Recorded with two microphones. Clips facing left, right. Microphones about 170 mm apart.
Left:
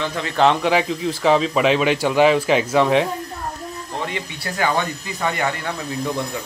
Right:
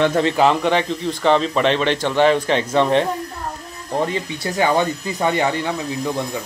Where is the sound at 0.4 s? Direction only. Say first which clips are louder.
Left 3 dB; centre (ahead or behind).